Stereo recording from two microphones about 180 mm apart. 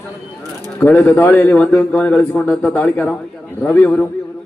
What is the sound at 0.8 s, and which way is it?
A man's voice, 10° left (ahead or behind).